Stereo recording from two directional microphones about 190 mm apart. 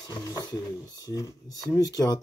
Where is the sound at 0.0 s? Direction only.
20° left (ahead or behind).